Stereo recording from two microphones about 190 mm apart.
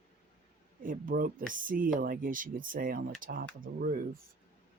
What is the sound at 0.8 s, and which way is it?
Speech, 45° right (ahead or behind).